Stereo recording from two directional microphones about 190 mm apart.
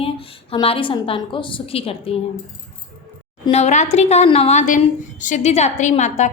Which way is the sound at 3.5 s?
35° left (ahead or behind).